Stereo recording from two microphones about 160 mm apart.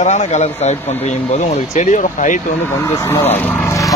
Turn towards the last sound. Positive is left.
turn(degrees=20)  # may be behind; listen again after turning